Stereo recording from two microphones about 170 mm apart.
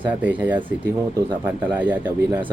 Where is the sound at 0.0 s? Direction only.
10° right (ahead or behind).